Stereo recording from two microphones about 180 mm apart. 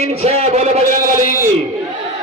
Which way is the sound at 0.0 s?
35° right (ahead or behind).